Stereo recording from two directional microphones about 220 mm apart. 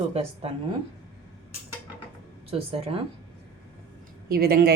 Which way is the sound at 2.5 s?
25° right (ahead or behind).